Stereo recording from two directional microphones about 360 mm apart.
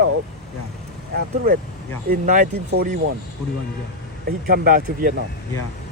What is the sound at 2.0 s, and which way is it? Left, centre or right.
Speech, right.